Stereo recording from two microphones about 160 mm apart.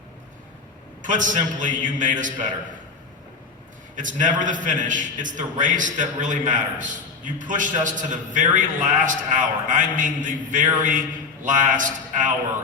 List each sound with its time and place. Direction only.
1.0 s a man's voice: 55° right (ahead or behind)
3.9 s a man's voice: 55° right (ahead or behind)